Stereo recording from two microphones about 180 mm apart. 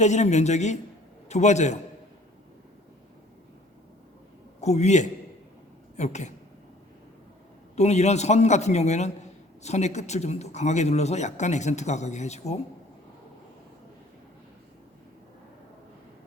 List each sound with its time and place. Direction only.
0.0 s speech: 40° left (ahead or behind)
4.6 s speech: 40° left (ahead or behind)
7.8 s speech: 40° left (ahead or behind)